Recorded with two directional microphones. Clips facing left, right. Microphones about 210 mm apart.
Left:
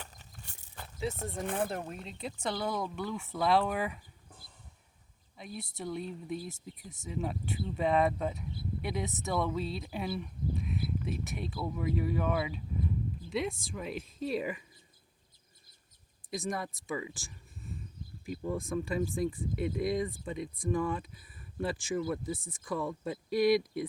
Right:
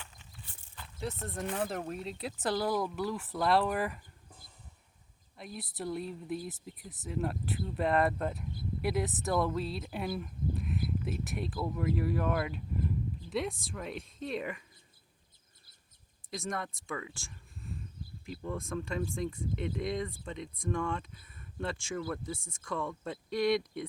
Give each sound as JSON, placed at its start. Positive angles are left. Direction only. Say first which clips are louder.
{"t": 0.0, "sound": "a sound", "louder": "left 3 dB", "side_deg": 40}
{"t": 1.6, "sound": "speech", "louder": "right 1 dB", "side_deg": 0}
{"t": 5.4, "sound": "speech", "louder": "right 1 dB", "side_deg": 0}
{"t": 16.3, "sound": "speech", "louder": "left 2 dB", "side_deg": 0}
{"t": 17.2, "sound": "a sound", "louder": "even", "side_deg": 0}
{"t": 18.7, "sound": "speech", "louder": "left 3 dB", "side_deg": 5}